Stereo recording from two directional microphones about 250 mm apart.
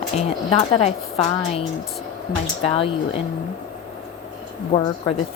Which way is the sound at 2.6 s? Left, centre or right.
Left.